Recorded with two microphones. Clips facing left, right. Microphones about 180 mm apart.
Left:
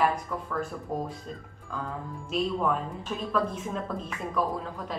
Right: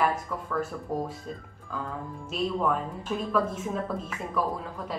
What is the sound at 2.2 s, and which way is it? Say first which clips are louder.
A woman's voice: even; centre (ahead or behind).